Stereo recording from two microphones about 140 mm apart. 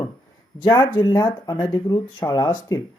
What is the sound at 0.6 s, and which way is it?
Speech, 30° left (ahead or behind).